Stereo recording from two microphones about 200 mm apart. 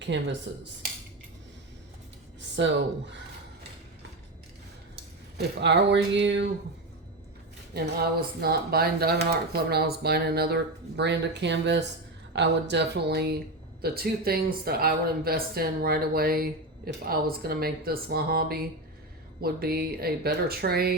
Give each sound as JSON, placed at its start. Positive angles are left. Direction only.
{"t": 0.0, "sound": "speech", "side_deg": -60}
{"t": 5.5, "sound": "speech", "side_deg": -60}
{"t": 7.7, "sound": "speech", "side_deg": -50}